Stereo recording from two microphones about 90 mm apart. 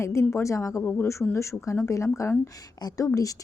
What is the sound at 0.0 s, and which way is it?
Speech, 30° left (ahead or behind).